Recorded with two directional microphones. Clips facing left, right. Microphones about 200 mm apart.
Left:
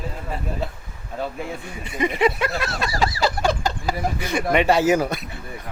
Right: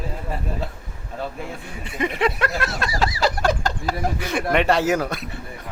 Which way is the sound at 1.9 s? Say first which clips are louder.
Left 2 dB; centre (ahead or behind).